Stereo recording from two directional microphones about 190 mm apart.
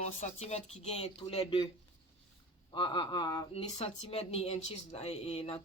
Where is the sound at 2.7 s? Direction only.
25° left (ahead or behind).